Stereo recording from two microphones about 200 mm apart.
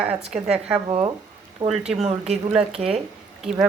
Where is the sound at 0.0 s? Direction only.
30° right (ahead or behind).